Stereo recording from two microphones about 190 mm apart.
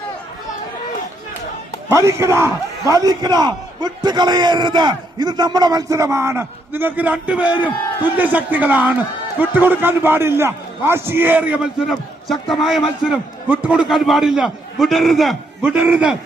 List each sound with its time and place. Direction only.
1.9 s a man's voice: 15° right (ahead or behind)